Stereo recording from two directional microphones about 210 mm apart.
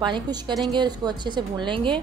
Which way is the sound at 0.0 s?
20° right (ahead or behind).